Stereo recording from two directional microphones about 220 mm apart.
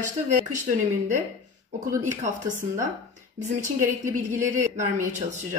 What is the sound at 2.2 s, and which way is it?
Speech, 35° right (ahead or behind).